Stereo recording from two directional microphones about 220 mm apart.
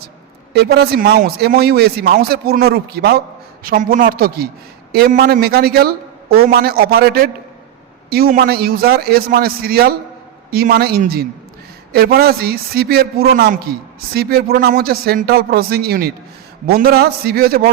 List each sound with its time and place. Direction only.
0.5 s a man's voice: 50° right (ahead or behind)